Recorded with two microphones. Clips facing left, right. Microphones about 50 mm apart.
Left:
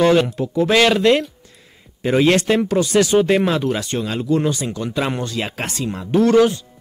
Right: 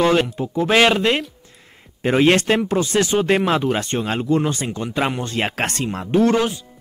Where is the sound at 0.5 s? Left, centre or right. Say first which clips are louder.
Right 1 dB; right.